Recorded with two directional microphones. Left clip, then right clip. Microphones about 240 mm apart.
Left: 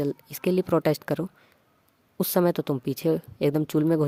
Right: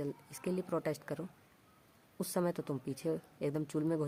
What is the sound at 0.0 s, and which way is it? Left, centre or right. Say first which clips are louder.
Speech: left 13 dB; left.